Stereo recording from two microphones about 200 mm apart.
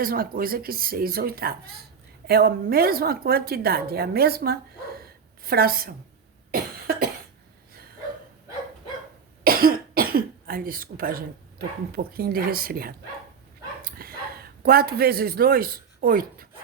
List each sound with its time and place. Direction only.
0.0 s a woman's voice: 45° right (ahead or behind)
6.5 s cough: 50° right (ahead or behind)
9.4 s cough: 45° right (ahead or behind)
11.9 s a woman's voice: 50° right (ahead or behind)
13.8 s a sound: 50° right (ahead or behind)